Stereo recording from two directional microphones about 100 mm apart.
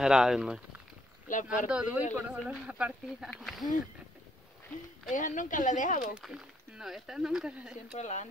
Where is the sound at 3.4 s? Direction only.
Centre (ahead or behind).